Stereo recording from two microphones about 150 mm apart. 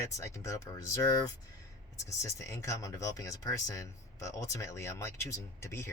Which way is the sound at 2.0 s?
20° left (ahead or behind).